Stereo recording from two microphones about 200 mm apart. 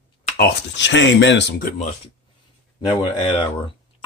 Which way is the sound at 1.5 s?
40° left (ahead or behind).